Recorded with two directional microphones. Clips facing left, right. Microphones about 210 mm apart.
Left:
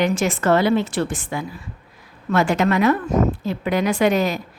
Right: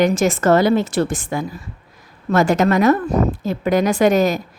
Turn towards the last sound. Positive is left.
turn(degrees=-45)  # may be behind; listen again after turning